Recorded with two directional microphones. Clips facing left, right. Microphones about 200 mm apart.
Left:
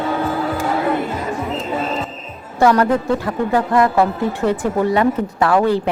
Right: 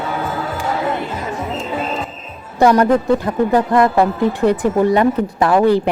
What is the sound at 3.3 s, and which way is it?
A woman's voice, 20° right (ahead or behind).